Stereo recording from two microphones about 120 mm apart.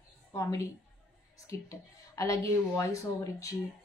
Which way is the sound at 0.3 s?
25° left (ahead or behind).